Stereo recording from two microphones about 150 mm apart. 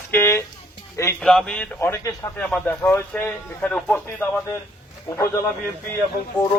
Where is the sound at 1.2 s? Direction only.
5° left (ahead or behind).